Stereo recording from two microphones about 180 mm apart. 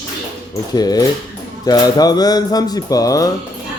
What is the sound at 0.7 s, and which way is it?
Speech, 20° left (ahead or behind).